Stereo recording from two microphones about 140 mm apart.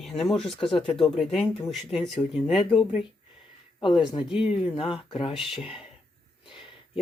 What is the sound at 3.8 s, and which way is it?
Speech, 35° left (ahead or behind).